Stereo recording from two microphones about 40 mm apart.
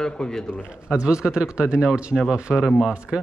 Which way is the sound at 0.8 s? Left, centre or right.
Right.